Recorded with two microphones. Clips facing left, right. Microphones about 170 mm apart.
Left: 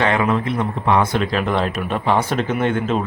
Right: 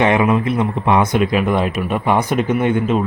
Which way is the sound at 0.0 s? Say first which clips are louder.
Right 4 dB; 20° right (ahead or behind).